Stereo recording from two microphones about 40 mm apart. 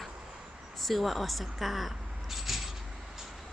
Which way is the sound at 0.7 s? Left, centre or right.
Centre.